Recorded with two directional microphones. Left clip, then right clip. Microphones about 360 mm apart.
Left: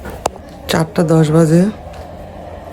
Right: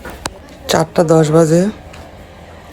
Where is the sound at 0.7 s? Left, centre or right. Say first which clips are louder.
Right 3 dB; centre.